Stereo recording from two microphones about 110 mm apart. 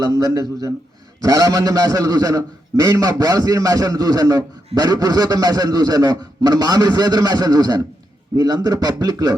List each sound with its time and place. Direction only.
0.0 s a man's voice: 35° right (ahead or behind)